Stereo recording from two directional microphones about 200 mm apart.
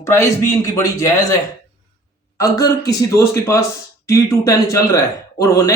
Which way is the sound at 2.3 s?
15° left (ahead or behind).